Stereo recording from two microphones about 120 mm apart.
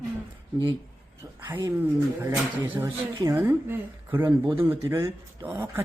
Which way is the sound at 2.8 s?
30° right (ahead or behind).